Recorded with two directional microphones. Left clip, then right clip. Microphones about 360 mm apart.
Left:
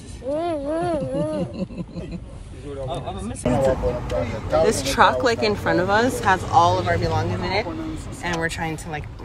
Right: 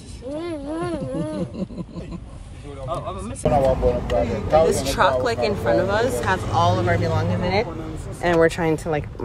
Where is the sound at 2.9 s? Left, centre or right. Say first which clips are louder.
Right 6 dB; centre.